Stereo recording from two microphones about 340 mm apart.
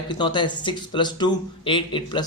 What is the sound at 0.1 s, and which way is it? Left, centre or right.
A man's voice, centre.